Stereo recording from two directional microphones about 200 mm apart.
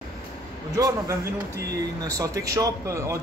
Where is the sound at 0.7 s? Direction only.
20° right (ahead or behind).